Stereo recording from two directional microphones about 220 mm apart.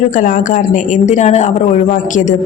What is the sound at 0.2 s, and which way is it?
A woman's voice, 35° left (ahead or behind).